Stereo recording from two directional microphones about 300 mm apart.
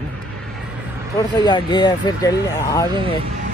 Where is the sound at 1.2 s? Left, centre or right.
Centre.